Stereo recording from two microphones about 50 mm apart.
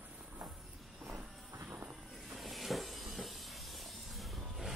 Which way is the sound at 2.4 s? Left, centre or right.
Centre.